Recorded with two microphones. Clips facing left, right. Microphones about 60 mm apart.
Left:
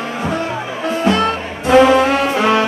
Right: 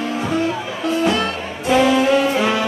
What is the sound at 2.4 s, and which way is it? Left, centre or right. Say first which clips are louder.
Brass instrument: left 4 dB; left.